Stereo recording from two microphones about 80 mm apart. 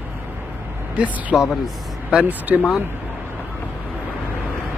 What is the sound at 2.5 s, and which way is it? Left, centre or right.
Speech, centre.